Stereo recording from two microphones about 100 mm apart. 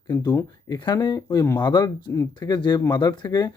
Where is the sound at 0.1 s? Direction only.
40° left (ahead or behind).